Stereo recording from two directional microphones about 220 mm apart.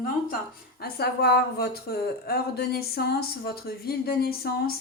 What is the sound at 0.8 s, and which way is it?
Speech, 45° left (ahead or behind).